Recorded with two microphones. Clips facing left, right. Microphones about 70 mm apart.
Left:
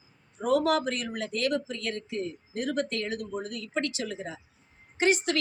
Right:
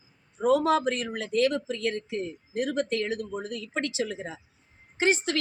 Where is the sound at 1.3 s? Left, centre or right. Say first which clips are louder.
Right 5 dB; right.